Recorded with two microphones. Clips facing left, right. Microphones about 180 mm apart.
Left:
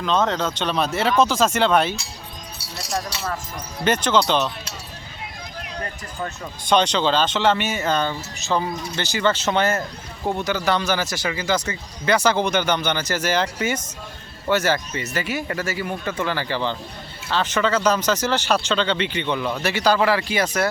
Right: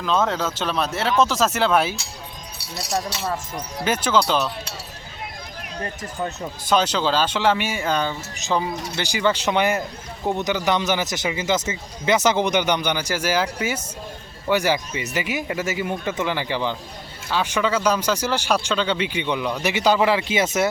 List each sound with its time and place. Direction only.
0.0 s speech: 5° right (ahead or behind)
3.8 s speech: 5° right (ahead or behind)
6.7 s speech: 5° right (ahead or behind); by 20.7 s 20° right (ahead or behind)